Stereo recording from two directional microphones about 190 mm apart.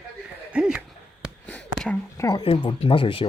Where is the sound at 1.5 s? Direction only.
5° left (ahead or behind).